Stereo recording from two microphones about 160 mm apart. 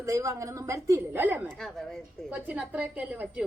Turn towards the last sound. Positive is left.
turn(degrees=-10)  # may be behind; listen again after turning